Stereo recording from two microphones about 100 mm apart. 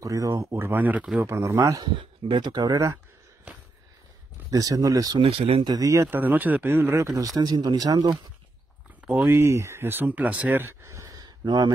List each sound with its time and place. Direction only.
0.0 s speech: 35° right (ahead or behind)
2.0 s speech: 55° right (ahead or behind); by 3.0 s 35° right (ahead or behind)
4.5 s a man's voice: 35° right (ahead or behind)
5.2 s speech: 75° right (ahead or behind)
5.6 s a man's voice: 40° right (ahead or behind)
6.0 s a man's voice: 20° right (ahead or behind); by 8.1 s 40° right (ahead or behind)
9.0 s speech: 20° right (ahead or behind); by 11.7 s 45° right (ahead or behind)